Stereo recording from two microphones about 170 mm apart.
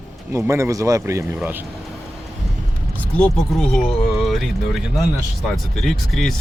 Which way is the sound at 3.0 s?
5° left (ahead or behind).